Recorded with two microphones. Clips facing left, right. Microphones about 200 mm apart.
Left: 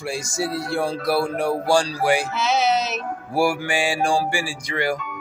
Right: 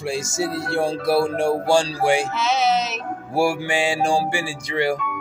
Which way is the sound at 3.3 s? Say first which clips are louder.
Right 1 dB; 25° right (ahead or behind).